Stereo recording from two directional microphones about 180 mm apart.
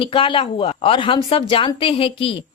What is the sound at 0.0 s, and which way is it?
Speech, 30° left (ahead or behind).